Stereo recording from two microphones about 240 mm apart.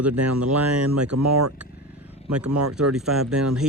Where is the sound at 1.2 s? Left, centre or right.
Right.